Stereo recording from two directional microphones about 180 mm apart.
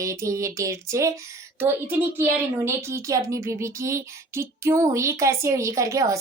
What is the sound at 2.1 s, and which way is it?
Speech, 15° right (ahead or behind).